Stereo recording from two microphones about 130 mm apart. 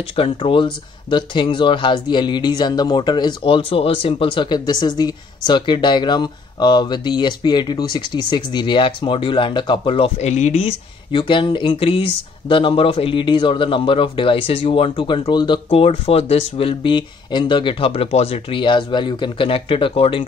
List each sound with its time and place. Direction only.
0.0 s speech: 45° left (ahead or behind)
10.1 s speech: 60° left (ahead or behind); by 20.2 s 45° left (ahead or behind)